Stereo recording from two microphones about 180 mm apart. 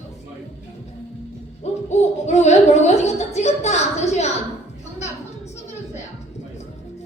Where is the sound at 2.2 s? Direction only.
40° left (ahead or behind).